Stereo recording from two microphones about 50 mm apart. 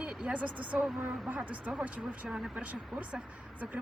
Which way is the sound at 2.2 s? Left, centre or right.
Centre.